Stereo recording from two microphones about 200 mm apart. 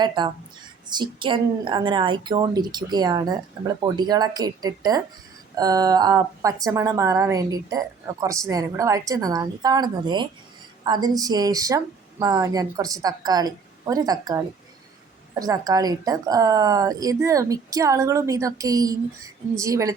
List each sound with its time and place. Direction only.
0.2 s a woman's voice: 20° right (ahead or behind)